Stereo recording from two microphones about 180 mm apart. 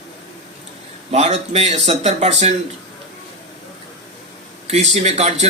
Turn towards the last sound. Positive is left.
turn(degrees=-40)  # may be behind; listen again after turning